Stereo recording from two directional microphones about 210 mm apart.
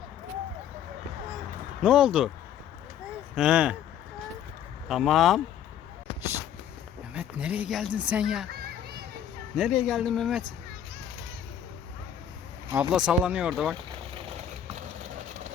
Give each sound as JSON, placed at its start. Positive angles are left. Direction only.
{"t": 1.8, "sound": "speech", "side_deg": -5}
{"t": 3.3, "sound": "speech", "side_deg": -5}
{"t": 4.9, "sound": "speech", "side_deg": 0}
{"t": 7.1, "sound": "speech", "side_deg": -5}
{"t": 8.5, "sound": "children playing", "side_deg": -45}
{"t": 9.6, "sound": "speech", "side_deg": 0}
{"t": 12.7, "sound": "speech", "side_deg": -5}